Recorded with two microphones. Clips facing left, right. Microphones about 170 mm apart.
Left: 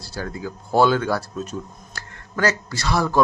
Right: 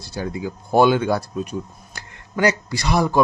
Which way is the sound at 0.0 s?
20° right (ahead or behind).